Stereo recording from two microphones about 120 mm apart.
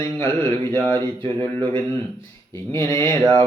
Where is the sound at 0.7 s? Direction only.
20° left (ahead or behind).